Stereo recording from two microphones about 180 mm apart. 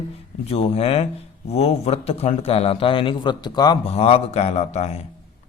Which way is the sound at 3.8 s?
35° left (ahead or behind).